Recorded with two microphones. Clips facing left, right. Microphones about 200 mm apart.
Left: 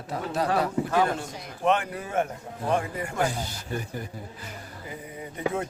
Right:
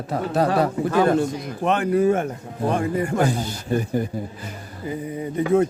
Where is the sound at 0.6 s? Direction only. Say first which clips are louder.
Right 5 dB; 45° right (ahead or behind).